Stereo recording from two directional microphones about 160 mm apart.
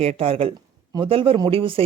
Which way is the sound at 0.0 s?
40° right (ahead or behind).